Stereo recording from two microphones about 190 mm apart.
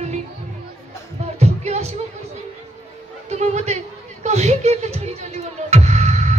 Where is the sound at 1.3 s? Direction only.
35° right (ahead or behind).